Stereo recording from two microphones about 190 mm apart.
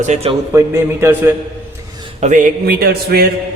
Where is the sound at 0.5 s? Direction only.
15° right (ahead or behind).